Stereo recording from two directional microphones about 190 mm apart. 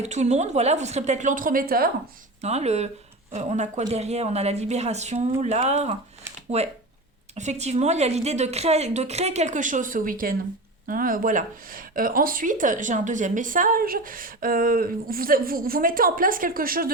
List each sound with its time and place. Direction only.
0.0 s a woman's voice: 35° right (ahead or behind)
2.4 s a woman's voice: 35° right (ahead or behind)